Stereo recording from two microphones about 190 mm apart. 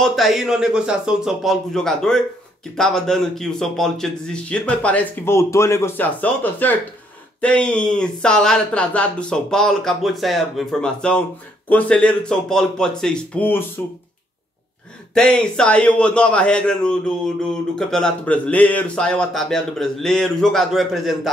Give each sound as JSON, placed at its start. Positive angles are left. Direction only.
{"t": 0.0, "sound": "a man's voice", "side_deg": 0}
{"t": 15.1, "sound": "speech", "side_deg": 5}